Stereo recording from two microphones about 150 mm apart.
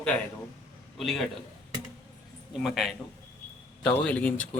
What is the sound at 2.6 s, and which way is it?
A man's voice, centre (ahead or behind).